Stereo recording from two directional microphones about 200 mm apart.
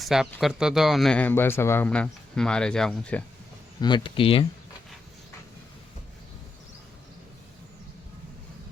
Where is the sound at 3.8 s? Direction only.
25° left (ahead or behind).